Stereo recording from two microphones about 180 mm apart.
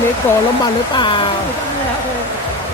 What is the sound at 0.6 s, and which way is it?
Speech, 25° left (ahead or behind).